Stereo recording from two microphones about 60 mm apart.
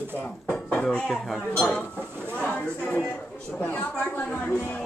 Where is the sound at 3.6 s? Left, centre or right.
Left.